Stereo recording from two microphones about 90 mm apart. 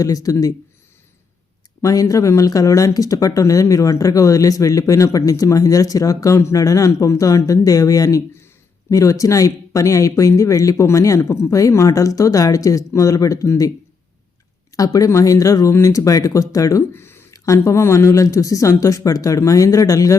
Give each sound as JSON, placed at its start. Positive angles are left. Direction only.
{"t": 0.0, "sound": "speech", "side_deg": 40}
{"t": 1.8, "sound": "speech", "side_deg": 40}
{"t": 14.8, "sound": "speech", "side_deg": 40}
{"t": 16.9, "sound": "a sound", "side_deg": 25}
{"t": 17.3, "sound": "a sound", "side_deg": 40}
{"t": 17.6, "sound": "speech", "side_deg": 30}